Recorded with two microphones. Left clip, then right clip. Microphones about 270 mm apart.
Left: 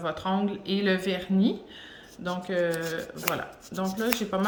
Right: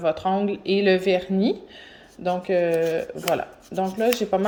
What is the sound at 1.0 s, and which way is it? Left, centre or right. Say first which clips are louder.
Speech: right 9 dB; right.